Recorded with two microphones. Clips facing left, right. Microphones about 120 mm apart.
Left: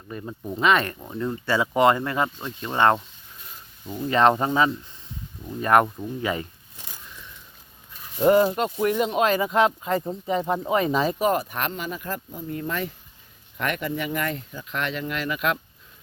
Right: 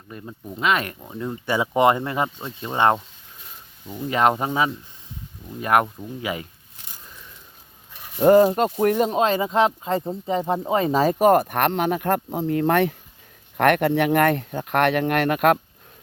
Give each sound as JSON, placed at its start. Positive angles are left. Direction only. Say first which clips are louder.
{"t": 0.1, "sound": "speech", "louder": "left 3 dB", "side_deg": 0}
{"t": 3.8, "sound": "speech", "louder": "left 1 dB", "side_deg": -5}
{"t": 8.2, "sound": "speech", "louder": "right 4 dB", "side_deg": -35}
{"t": 9.1, "sound": "speech", "louder": "right 1 dB", "side_deg": -25}